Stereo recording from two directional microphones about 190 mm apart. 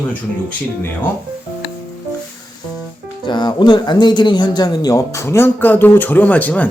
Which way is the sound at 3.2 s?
25° left (ahead or behind).